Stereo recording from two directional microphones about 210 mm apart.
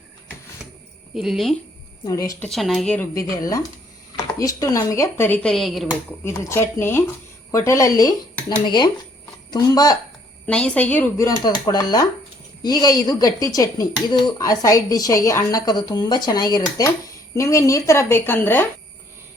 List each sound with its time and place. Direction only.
1.1 s speech: centre (ahead or behind)
2.0 s speech: 15° left (ahead or behind)
2.5 s speech: centre (ahead or behind)
6.2 s speech: 10° left (ahead or behind)
10.4 s speech: 5° left (ahead or behind)